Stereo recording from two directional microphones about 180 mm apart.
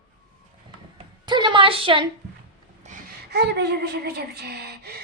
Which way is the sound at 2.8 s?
40° right (ahead or behind).